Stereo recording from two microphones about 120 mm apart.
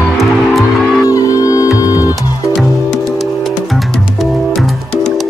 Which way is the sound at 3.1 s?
Centre (ahead or behind).